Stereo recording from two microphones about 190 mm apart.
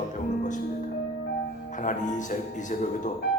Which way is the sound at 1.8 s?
40° left (ahead or behind).